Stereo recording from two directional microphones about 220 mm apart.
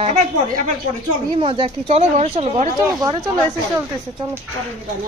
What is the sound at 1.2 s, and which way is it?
Speech, 25° right (ahead or behind).